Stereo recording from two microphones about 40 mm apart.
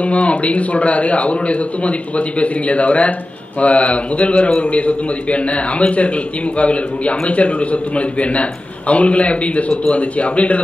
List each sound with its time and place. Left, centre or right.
0.0 s a man's voice: left